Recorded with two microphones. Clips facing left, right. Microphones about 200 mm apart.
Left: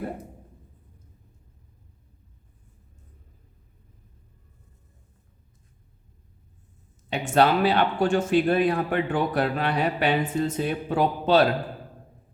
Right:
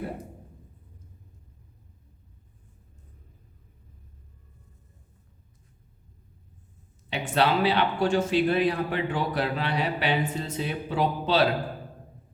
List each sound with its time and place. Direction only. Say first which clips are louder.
7.1 s speech: left 4 dB; 45° left (ahead or behind)